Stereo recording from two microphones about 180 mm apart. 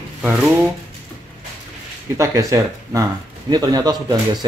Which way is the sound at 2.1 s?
15° right (ahead or behind).